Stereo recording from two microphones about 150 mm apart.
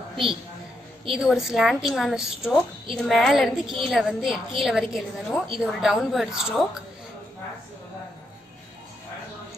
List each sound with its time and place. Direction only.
1.0 s a woman's voice: 5° right (ahead or behind)